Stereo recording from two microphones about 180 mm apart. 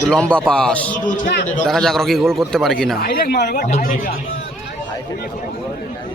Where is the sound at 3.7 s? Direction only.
50° left (ahead or behind).